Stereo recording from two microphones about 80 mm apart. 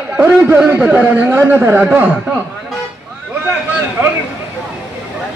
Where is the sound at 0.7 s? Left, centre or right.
Centre.